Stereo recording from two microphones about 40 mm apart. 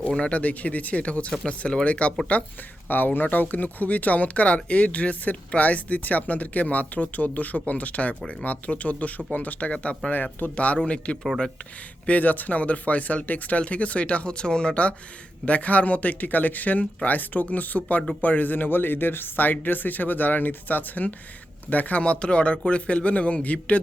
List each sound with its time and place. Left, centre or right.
0.0 s speech: left
2.9 s speech: left
9.7 s speech: left
12.0 s speech: left